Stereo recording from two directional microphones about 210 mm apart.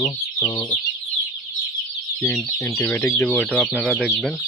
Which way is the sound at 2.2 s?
10° left (ahead or behind).